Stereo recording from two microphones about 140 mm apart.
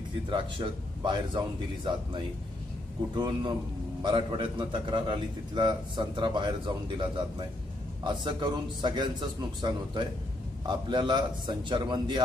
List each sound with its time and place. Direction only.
0.3 s a man's voice: 35° right (ahead or behind)
3.2 s a man's voice: 30° right (ahead or behind)